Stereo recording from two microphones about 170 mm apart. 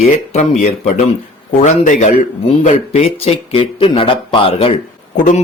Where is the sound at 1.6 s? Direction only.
45° left (ahead or behind).